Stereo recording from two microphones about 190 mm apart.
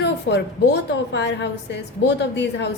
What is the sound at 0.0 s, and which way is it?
A woman's voice, 65° left (ahead or behind).